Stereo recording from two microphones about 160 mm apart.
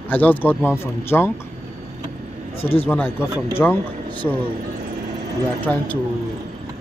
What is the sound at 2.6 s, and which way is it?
Speech, 35° left (ahead or behind).